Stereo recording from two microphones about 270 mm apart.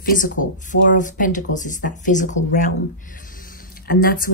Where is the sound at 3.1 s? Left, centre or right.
Left.